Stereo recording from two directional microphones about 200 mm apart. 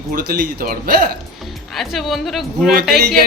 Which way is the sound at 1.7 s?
Centre (ahead or behind).